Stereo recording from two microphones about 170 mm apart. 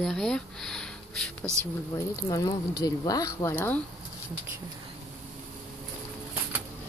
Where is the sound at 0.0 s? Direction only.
Centre (ahead or behind).